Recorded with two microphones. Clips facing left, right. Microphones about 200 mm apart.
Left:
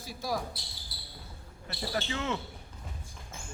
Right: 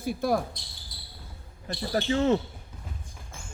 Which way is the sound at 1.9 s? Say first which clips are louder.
Right 10 dB; 35° right (ahead or behind).